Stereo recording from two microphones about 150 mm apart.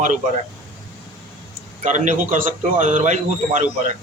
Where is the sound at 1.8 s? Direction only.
55° right (ahead or behind).